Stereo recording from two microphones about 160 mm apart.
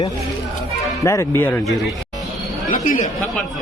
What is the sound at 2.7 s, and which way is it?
Speech, 55° left (ahead or behind).